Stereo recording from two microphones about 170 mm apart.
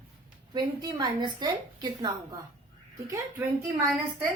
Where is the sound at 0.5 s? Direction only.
25° right (ahead or behind).